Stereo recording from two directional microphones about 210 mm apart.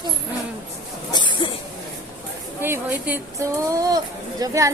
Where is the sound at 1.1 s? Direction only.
20° left (ahead or behind).